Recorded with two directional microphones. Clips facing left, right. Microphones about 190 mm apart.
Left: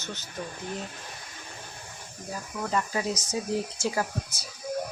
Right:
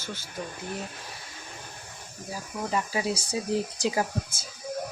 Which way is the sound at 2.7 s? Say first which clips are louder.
Even; 10° right (ahead or behind).